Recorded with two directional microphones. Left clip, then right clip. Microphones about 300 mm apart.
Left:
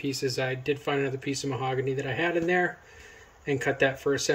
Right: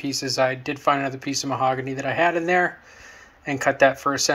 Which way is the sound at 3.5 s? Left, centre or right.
Centre.